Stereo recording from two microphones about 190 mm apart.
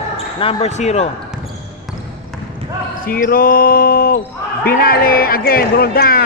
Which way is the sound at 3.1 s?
50° left (ahead or behind).